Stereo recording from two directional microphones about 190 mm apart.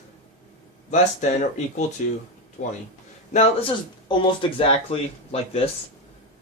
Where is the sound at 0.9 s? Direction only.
40° left (ahead or behind).